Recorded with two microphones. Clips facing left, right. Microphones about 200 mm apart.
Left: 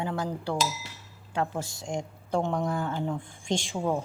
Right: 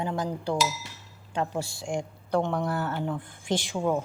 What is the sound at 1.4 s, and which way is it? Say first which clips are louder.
A woman's voice: right 1 dB; 10° right (ahead or behind).